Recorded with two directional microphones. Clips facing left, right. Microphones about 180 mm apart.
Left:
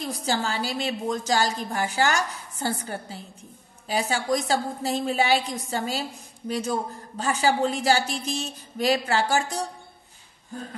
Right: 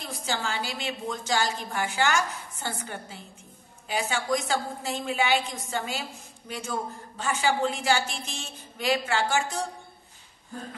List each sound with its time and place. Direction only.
0.0 s a woman's voice: 40° left (ahead or behind)